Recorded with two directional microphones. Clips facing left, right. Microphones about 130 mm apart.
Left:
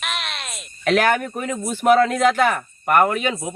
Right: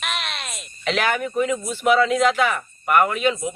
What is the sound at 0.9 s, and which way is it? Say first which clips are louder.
Speech: left 4 dB; 50° left (ahead or behind).